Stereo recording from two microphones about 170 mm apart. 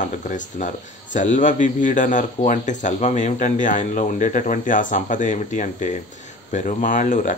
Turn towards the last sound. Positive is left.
turn(degrees=50)  # may be behind; listen again after turning